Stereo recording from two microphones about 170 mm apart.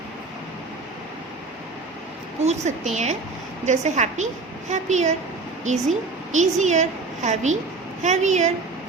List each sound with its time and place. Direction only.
2.4 s a woman's voice: 40° right (ahead or behind)